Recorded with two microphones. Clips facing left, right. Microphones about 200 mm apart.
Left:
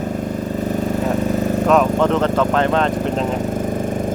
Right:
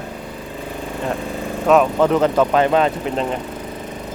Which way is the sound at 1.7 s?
5° right (ahead or behind).